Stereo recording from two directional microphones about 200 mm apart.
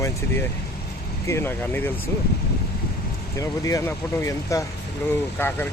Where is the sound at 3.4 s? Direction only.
15° left (ahead or behind).